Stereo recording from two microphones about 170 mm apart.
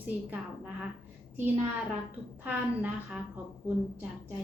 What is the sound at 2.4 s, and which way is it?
Speech, 10° right (ahead or behind).